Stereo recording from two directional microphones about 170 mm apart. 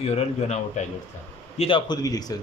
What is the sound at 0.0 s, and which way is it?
A man's voice, 40° left (ahead or behind).